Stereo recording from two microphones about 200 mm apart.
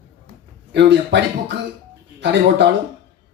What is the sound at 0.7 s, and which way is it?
Speech, 60° right (ahead or behind).